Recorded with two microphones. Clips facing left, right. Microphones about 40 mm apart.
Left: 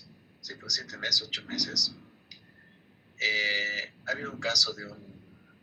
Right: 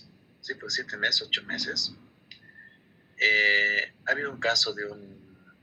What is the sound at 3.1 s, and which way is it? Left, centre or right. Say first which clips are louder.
Speech: right 6 dB; right.